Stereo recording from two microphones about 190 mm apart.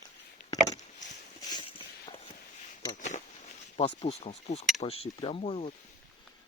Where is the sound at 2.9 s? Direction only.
40° left (ahead or behind).